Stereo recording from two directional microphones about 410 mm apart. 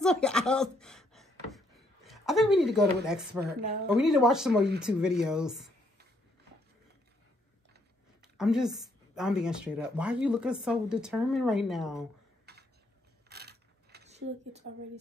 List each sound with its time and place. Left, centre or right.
0.0 s a sound: centre
2.0 s speech: centre
8.2 s speech: centre
12.5 s tick-tock: right
13.3 s coin: right